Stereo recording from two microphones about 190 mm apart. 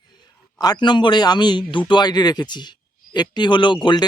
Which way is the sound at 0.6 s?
20° left (ahead or behind).